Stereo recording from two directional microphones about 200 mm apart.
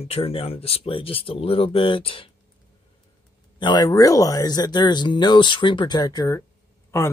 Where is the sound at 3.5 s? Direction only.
20° left (ahead or behind).